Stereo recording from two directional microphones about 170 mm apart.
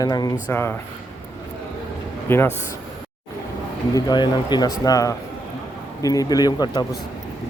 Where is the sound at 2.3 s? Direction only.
15° left (ahead or behind).